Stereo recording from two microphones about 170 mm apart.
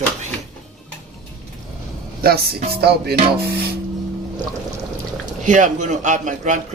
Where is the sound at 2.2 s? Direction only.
65° right (ahead or behind).